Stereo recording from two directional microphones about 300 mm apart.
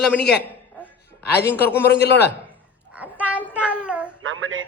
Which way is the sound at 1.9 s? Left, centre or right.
Left.